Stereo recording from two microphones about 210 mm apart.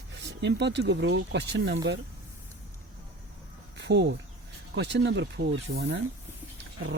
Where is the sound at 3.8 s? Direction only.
55° right (ahead or behind).